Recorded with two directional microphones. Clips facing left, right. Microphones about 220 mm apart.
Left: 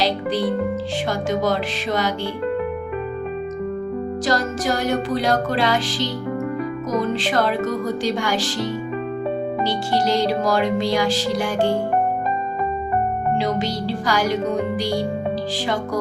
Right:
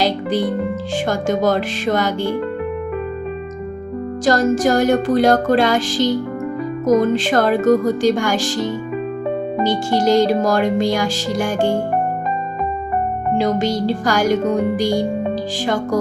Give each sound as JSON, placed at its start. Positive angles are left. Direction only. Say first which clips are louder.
{"t": 0.0, "sound": "music", "louder": "right 3 dB", "side_deg": -50}
{"t": 4.3, "sound": "music", "louder": "right 8 dB", "side_deg": -50}
{"t": 9.6, "sound": "music", "louder": "right 6 dB", "side_deg": -45}
{"t": 13.4, "sound": "music", "louder": "right 5 dB", "side_deg": -50}